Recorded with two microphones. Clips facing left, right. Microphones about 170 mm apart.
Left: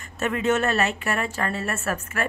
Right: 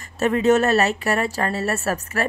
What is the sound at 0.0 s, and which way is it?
A woman's voice, 35° right (ahead or behind).